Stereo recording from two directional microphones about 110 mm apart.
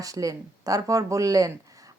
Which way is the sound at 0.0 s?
30° right (ahead or behind).